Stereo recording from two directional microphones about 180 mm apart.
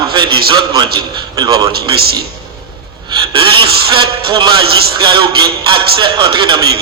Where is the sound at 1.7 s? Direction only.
60° right (ahead or behind).